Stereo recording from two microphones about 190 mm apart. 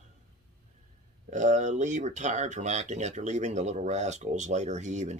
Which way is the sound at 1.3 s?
40° right (ahead or behind).